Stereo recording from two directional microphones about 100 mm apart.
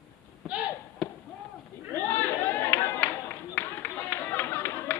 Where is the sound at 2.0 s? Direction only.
20° left (ahead or behind).